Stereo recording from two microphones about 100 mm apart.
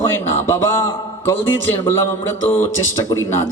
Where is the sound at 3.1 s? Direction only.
25° left (ahead or behind).